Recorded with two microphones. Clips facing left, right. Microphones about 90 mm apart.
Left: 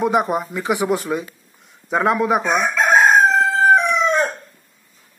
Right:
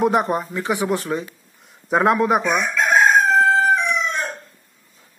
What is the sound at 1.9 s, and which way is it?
Speech, centre (ahead or behind).